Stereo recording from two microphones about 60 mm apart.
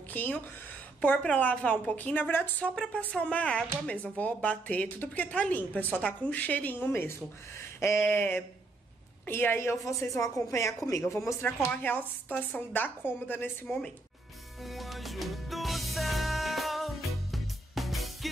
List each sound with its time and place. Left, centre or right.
0.1 s speech: left
1.2 s speech: left
6.9 s speech: left
9.8 s speech: left
11.4 s speech: left
14.6 s music: centre